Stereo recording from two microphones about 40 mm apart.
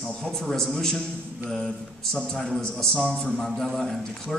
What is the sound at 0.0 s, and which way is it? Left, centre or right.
A man's voice, centre.